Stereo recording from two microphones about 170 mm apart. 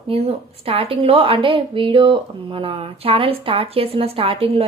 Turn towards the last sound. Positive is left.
turn(degrees=-30)  # may be behind; listen again after turning